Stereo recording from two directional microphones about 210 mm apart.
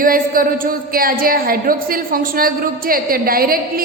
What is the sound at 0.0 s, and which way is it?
A woman's voice, 40° right (ahead or behind).